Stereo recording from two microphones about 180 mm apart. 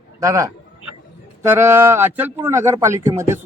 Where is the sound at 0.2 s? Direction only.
20° right (ahead or behind).